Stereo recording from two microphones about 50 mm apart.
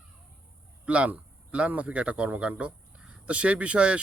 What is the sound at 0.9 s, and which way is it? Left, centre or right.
Speech, right.